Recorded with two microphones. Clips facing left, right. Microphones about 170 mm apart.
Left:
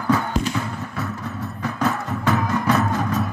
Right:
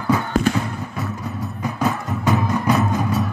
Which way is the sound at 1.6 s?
15° right (ahead or behind).